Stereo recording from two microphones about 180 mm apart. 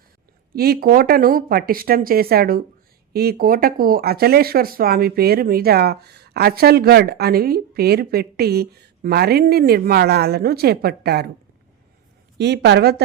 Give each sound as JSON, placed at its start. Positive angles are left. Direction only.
{"t": 0.5, "sound": "speech", "side_deg": -60}
{"t": 12.4, "sound": "speech", "side_deg": -70}